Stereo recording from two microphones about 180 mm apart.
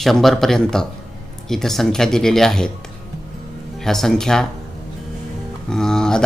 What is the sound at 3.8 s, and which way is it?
Speech, centre (ahead or behind).